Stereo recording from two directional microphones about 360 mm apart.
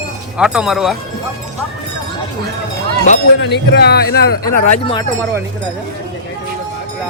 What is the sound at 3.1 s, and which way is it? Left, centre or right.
Speech, left.